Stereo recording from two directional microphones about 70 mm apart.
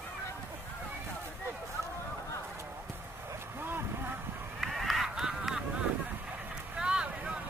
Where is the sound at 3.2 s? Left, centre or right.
Right.